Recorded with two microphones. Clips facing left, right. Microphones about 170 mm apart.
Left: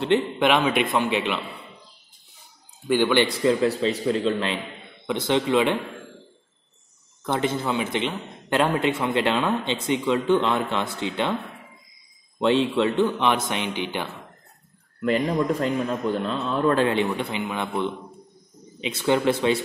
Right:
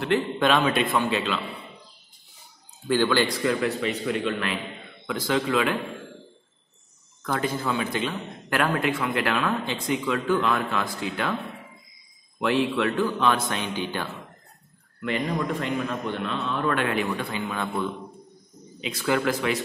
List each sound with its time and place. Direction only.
0.0 s a man's voice: 20° left (ahead or behind)
2.9 s speech: 20° left (ahead or behind)
7.2 s speech: 25° left (ahead or behind)
12.4 s speech: 25° left (ahead or behind)
15.0 s a man's voice: 35° left (ahead or behind)